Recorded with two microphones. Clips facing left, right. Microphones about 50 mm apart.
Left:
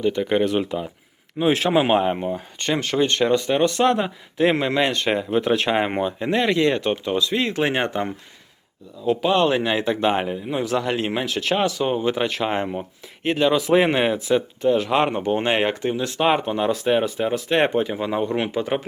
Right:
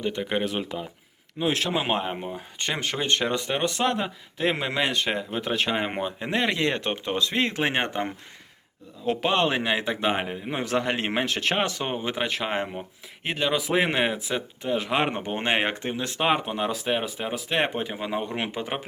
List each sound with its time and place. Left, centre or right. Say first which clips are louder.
0.2 s speech: left 7 dB; centre
1.4 s speech: left 7 dB; left
2.6 s speech: left 7 dB; centre
3.8 s speech: left 6 dB; centre
5.0 s speech: left 7 dB; centre
6.0 s speech: left 6 dB; centre
6.3 s speech: left 5 dB; centre
9.0 s speech: left 5 dB; right
9.4 s speech: left 4 dB; centre
10.8 s speech: right 1 dB; right
11.9 s speech: left 6 dB; centre
16.2 s speech: left 5 dB; centre
18.3 s speech: left 7 dB; right